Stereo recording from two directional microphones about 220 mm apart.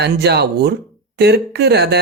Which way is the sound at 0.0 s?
50° right (ahead or behind).